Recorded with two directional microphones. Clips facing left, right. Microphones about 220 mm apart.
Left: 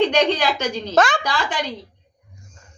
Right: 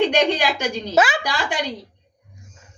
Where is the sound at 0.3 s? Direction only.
10° right (ahead or behind).